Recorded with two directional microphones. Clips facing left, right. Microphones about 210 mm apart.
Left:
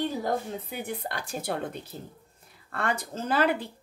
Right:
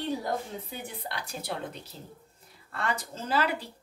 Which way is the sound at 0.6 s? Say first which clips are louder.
Left 5 dB; 50° left (ahead or behind).